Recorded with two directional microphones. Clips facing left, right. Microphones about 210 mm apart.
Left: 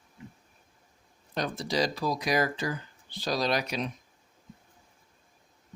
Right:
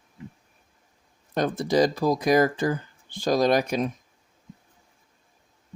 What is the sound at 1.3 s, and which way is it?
Speech, 50° right (ahead or behind).